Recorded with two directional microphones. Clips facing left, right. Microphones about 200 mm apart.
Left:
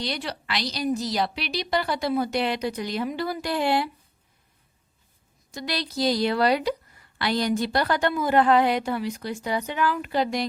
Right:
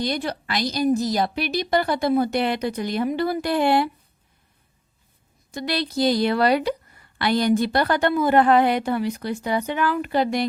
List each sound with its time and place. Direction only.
0.0 s a woman's voice: 50° right (ahead or behind)
5.5 s a woman's voice: 60° right (ahead or behind)